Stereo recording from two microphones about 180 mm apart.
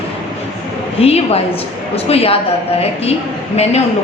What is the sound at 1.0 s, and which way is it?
A woman's voice, 35° left (ahead or behind).